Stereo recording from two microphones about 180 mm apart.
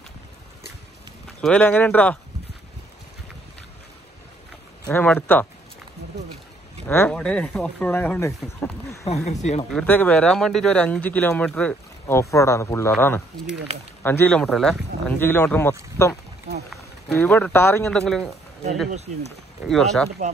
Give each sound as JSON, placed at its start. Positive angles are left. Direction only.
{"t": 1.4, "sound": "speech", "side_deg": 5}
{"t": 4.8, "sound": "speech", "side_deg": 10}
{"t": 6.9, "sound": "speech", "side_deg": 10}
{"t": 9.0, "sound": "speech", "side_deg": 35}
{"t": 9.7, "sound": "speech", "side_deg": 5}
{"t": 19.6, "sound": "speech", "side_deg": 0}